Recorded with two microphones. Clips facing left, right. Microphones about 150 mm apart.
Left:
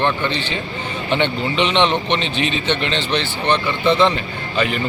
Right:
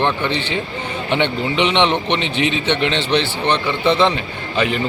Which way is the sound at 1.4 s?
15° right (ahead or behind).